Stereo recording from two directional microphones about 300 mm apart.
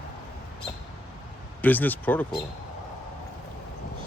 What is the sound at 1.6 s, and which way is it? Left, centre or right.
Speech, centre.